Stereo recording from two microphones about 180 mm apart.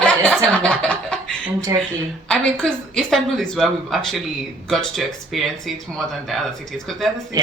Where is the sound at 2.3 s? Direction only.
5° left (ahead or behind).